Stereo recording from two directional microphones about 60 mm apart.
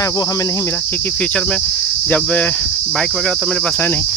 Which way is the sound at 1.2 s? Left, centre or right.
Centre.